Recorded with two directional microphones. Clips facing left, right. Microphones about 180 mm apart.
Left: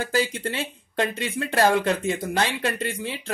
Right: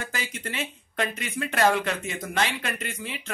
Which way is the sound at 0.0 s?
35° left (ahead or behind).